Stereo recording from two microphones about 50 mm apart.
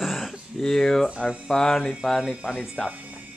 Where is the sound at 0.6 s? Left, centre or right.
Centre.